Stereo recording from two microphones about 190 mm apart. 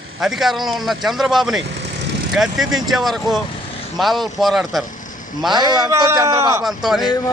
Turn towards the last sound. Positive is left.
turn(degrees=20)  # may be behind; listen again after turning